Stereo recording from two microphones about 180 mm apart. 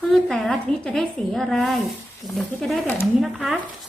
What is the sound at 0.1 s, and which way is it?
A woman's voice, centre (ahead or behind).